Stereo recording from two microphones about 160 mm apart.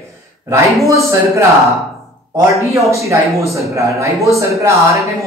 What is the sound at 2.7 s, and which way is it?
Speech, 20° right (ahead or behind).